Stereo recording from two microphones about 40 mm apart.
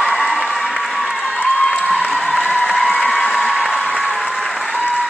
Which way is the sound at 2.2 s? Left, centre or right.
Left.